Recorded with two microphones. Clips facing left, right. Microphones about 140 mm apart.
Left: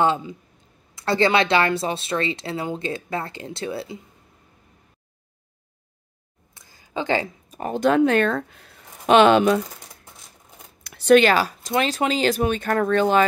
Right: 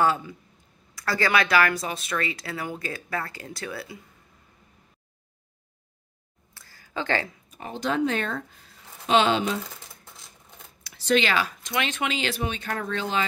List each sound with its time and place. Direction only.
0.0 s speech: 20° left (ahead or behind)
6.5 s a sound: 15° left (ahead or behind)
7.5 s speech: 50° left (ahead or behind)
10.8 s speech: 55° left (ahead or behind)